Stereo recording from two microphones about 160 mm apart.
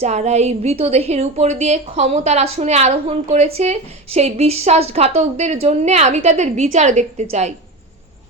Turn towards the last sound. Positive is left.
turn(degrees=-45)  # may be behind; listen again after turning